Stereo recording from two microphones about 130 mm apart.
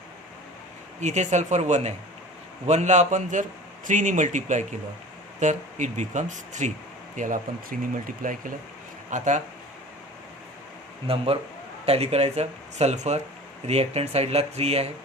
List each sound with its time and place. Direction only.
1.0 s speech: 65° right (ahead or behind)
7.2 s speech: 90° right
9.0 s speech: 70° right (ahead or behind)
11.0 s speech: 45° right (ahead or behind)